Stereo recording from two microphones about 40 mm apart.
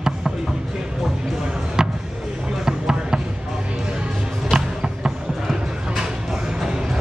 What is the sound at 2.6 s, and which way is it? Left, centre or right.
Basketball bounce, centre.